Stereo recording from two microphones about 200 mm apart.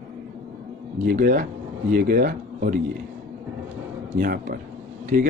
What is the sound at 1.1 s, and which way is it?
Speech, 45° right (ahead or behind).